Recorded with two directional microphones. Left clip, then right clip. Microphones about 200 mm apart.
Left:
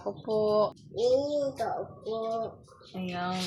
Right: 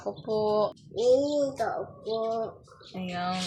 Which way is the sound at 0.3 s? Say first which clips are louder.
Even; 5° left (ahead or behind).